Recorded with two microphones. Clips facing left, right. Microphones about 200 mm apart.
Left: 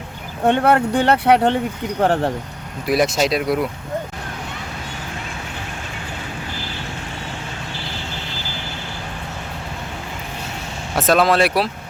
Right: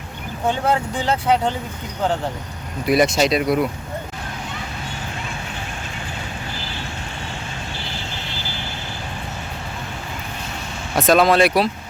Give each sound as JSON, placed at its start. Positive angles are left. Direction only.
{"t": 0.4, "sound": "speech", "side_deg": 65}
{"t": 2.8, "sound": "speech", "side_deg": 0}
{"t": 10.9, "sound": "speech", "side_deg": 5}